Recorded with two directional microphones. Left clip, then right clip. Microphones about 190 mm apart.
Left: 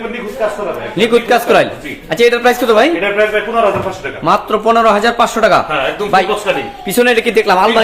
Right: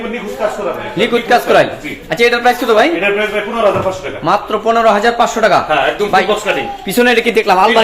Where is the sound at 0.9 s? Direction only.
20° left (ahead or behind).